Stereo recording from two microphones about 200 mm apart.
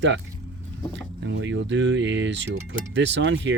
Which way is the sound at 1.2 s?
65° right (ahead or behind).